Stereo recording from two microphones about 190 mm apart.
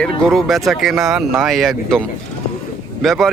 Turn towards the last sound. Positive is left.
turn(degrees=0)  # may be behind; listen again after turning